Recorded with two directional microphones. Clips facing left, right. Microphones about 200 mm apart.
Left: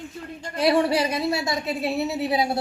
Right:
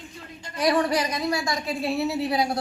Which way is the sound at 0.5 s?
25° left (ahead or behind).